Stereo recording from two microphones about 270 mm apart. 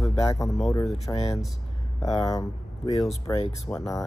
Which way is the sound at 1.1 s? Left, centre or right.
Left.